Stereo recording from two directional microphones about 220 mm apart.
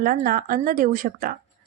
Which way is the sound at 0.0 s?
40° right (ahead or behind).